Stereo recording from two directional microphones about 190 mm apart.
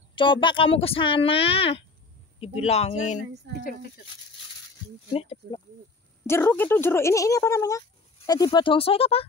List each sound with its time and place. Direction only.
0.1 s speech: 25° left (ahead or behind)
5.1 s speech: 35° left (ahead or behind)
6.2 s speech: 10° left (ahead or behind); by 9.2 s 30° left (ahead or behind)